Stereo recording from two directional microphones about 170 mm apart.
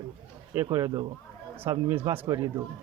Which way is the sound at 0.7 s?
25° right (ahead or behind).